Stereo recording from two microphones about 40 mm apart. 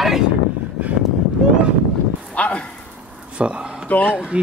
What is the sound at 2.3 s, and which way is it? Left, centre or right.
Speech, left.